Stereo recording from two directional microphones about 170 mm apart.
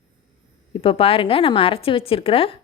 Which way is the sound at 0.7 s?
35° left (ahead or behind).